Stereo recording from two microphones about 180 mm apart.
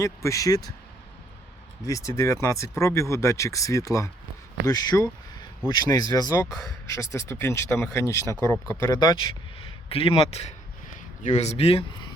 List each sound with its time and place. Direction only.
0.0 s speech: 15° left (ahead or behind)
1.8 s speech: 15° left (ahead or behind); by 11.9 s 30° left (ahead or behind)